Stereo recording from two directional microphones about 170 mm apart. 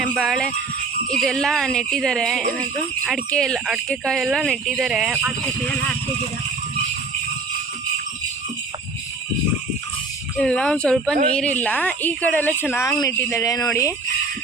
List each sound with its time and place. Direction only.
0.0 s speech: centre (ahead or behind)
10.3 s speech: 5° left (ahead or behind); by 13.7 s 20° left (ahead or behind)